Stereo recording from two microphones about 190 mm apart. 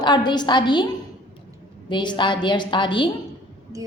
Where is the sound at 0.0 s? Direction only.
25° left (ahead or behind).